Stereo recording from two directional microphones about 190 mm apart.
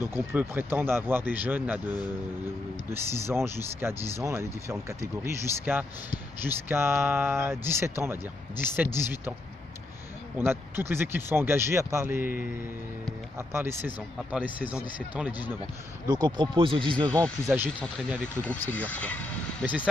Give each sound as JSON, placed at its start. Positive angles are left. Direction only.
{"t": 0.1, "sound": "speech", "side_deg": -10}
{"t": 10.3, "sound": "speech", "side_deg": -10}
{"t": 16.1, "sound": "speech", "side_deg": -20}
{"t": 17.6, "sound": "speech", "side_deg": -10}
{"t": 18.2, "sound": "speech", "side_deg": 10}
{"t": 19.6, "sound": "speech", "side_deg": -10}